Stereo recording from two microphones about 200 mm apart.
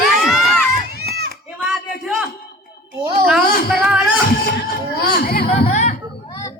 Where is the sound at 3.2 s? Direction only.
Centre (ahead or behind).